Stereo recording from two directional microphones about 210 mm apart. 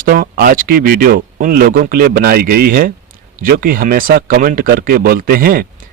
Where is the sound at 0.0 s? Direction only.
40° right (ahead or behind).